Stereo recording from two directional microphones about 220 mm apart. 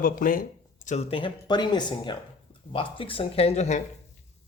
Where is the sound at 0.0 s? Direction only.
40° left (ahead or behind).